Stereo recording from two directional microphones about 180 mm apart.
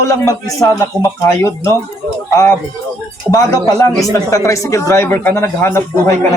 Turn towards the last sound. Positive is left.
turn(degrees=15)  # may be behind; listen again after turning